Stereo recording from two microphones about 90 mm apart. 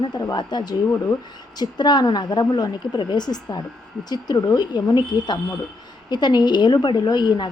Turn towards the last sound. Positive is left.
turn(degrees=60)  # may be behind; listen again after turning